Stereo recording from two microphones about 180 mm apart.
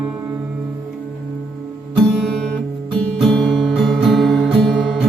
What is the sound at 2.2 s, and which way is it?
Music, centre (ahead or behind).